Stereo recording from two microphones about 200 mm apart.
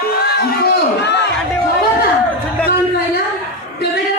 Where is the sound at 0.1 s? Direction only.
50° left (ahead or behind).